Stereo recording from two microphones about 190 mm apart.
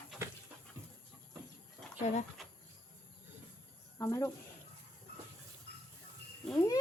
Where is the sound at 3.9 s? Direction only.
15° left (ahead or behind).